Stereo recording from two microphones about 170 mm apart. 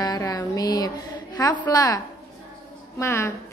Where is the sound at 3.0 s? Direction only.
15° left (ahead or behind).